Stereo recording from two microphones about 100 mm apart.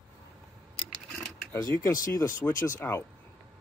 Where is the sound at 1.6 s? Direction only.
35° left (ahead or behind).